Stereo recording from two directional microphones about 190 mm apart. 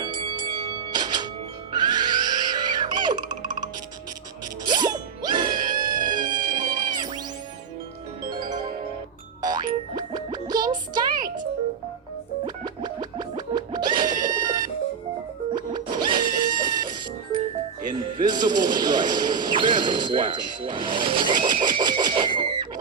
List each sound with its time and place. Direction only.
0.0 s music: 25° right (ahead or behind)
4.6 s music: 20° right (ahead or behind)
8.3 s music: 20° right (ahead or behind)
12.5 s music: 25° right (ahead or behind)
13.6 s a sound: 25° right (ahead or behind)
18.2 s a sound: 20° right (ahead or behind)